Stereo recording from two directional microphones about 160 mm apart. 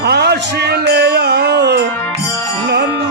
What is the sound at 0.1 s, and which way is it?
Music, 90° right.